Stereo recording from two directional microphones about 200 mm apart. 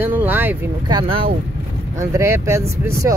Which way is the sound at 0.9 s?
25° right (ahead or behind).